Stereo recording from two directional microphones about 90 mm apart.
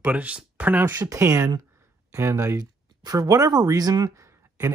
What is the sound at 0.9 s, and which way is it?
Speech, 35° right (ahead or behind).